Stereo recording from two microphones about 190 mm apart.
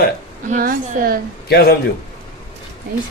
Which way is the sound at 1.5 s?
55° left (ahead or behind).